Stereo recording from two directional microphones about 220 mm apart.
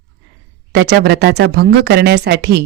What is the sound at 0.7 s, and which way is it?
Speech, 50° right (ahead or behind).